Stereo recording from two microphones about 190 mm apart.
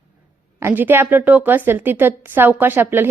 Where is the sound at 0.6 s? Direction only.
10° right (ahead or behind).